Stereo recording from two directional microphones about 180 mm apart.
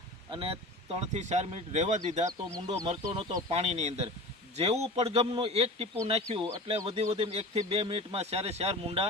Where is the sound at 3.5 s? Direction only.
35° right (ahead or behind).